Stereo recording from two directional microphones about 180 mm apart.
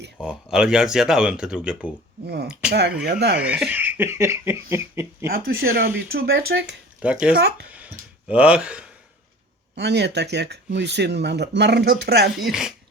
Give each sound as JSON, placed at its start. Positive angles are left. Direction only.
{"t": 0.2, "sound": "speech", "side_deg": -5}
{"t": 2.2, "sound": "speech", "side_deg": -65}
{"t": 3.4, "sound": "speech", "side_deg": -5}
{"t": 5.2, "sound": "speech", "side_deg": -55}
{"t": 7.0, "sound": "speech", "side_deg": -5}
{"t": 7.3, "sound": "speech", "side_deg": -60}
{"t": 8.3, "sound": "speech", "side_deg": -5}
{"t": 9.7, "sound": "speech", "side_deg": -70}
{"t": 12.4, "sound": "speech", "side_deg": 0}